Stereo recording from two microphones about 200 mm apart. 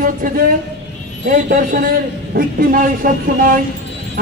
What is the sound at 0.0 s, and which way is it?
A man's voice, 45° right (ahead or behind).